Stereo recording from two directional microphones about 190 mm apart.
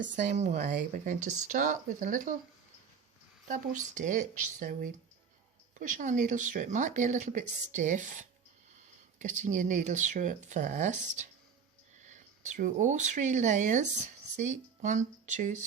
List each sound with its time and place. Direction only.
0.2 s speech: 40° right (ahead or behind)
3.4 s speech: 40° right (ahead or behind)
5.9 s speech: 40° right (ahead or behind)